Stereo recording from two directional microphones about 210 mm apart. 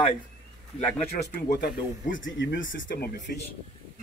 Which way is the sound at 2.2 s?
60° left (ahead or behind).